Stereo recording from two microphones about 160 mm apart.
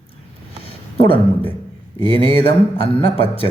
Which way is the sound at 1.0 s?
35° left (ahead or behind).